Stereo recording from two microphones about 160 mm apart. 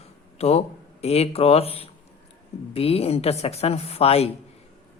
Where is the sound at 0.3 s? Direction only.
40° left (ahead or behind).